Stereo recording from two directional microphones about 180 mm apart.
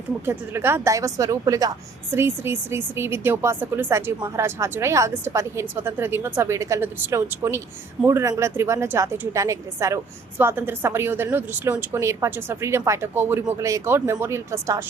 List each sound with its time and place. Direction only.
0.3 s speech: 15° right (ahead or behind)